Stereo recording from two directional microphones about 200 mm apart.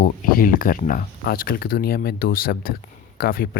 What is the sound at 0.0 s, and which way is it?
Speech, 45° left (ahead or behind).